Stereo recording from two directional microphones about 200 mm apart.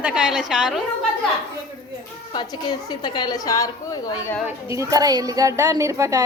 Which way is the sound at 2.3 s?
20° left (ahead or behind).